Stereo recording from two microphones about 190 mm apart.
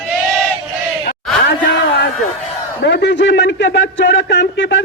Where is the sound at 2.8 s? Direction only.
65° left (ahead or behind).